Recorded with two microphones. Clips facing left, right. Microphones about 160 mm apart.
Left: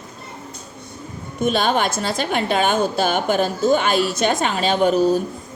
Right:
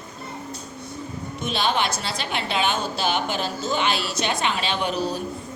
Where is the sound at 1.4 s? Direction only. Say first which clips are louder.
Left 6 dB; 50° left (ahead or behind).